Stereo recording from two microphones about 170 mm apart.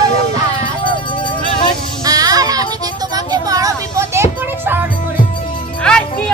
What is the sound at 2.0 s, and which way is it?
Child singing, 20° right (ahead or behind).